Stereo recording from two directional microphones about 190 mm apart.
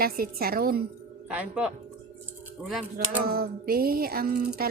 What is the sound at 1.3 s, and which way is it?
Speech, 5° right (ahead or behind).